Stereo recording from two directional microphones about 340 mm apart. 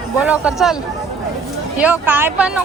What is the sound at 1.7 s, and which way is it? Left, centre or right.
Speech, centre.